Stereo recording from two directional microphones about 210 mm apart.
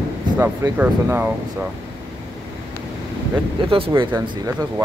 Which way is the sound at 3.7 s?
25° right (ahead or behind).